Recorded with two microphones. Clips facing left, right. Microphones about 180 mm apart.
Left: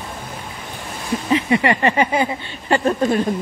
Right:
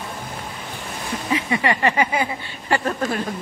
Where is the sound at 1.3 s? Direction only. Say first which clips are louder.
Left 4 dB; 25° left (ahead or behind).